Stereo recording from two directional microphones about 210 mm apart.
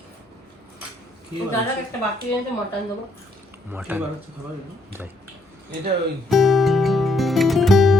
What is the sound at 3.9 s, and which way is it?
Speech, 10° right (ahead or behind).